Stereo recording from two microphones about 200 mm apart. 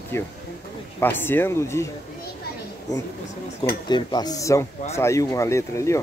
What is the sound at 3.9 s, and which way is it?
Speech, 20° left (ahead or behind).